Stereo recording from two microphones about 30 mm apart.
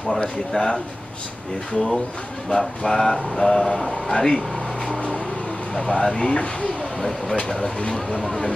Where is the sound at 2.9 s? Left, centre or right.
Centre.